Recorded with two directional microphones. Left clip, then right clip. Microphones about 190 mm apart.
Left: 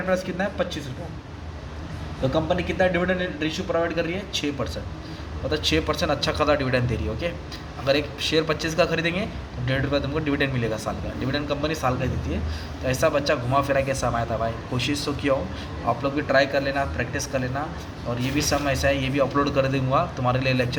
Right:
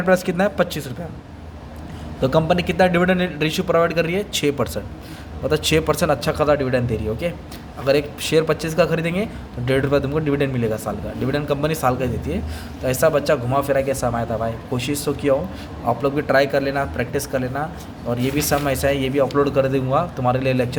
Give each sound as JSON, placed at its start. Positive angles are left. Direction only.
{"t": 0.1, "sound": "a man's voice", "side_deg": -50}
{"t": 2.3, "sound": "a man's voice", "side_deg": -60}